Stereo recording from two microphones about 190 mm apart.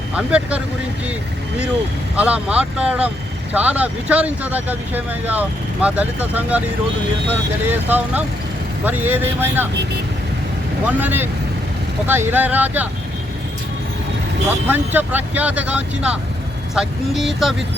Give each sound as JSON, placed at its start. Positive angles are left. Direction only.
{"t": 0.2, "sound": "speech", "side_deg": -5}
{"t": 2.1, "sound": "speech", "side_deg": -5}
{"t": 7.7, "sound": "speech", "side_deg": -10}
{"t": 10.8, "sound": "speech", "side_deg": -10}
{"t": 14.7, "sound": "speech", "side_deg": -10}